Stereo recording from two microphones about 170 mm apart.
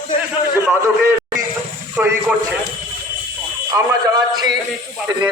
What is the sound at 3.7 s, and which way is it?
Speech, 20° right (ahead or behind).